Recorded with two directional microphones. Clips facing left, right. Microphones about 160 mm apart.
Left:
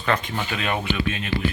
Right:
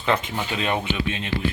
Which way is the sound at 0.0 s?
20° right (ahead or behind).